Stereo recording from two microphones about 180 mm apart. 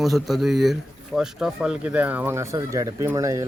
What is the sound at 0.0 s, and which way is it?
Speech, centre (ahead or behind).